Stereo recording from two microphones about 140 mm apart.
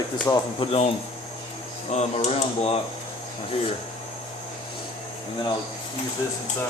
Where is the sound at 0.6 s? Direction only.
45° left (ahead or behind).